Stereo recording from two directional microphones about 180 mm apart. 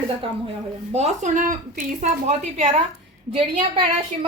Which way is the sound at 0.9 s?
40° right (ahead or behind).